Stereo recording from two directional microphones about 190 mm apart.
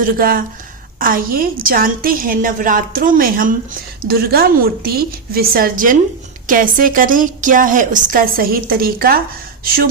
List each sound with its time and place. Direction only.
0.2 s a woman's voice: 50° right (ahead or behind)